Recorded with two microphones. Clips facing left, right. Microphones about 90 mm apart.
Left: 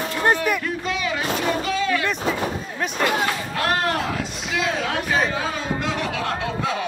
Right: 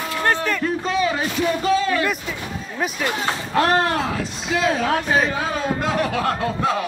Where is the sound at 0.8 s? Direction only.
35° right (ahead or behind).